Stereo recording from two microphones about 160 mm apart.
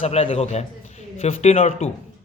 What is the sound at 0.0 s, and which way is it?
A man's voice, 40° left (ahead or behind).